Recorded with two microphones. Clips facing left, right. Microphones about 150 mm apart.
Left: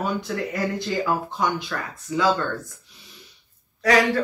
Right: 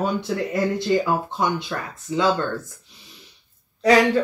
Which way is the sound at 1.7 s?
20° right (ahead or behind).